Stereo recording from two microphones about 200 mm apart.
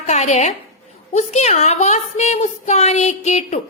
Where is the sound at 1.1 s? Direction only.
35° left (ahead or behind).